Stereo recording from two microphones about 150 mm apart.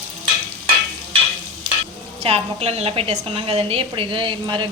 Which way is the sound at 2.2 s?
45° right (ahead or behind).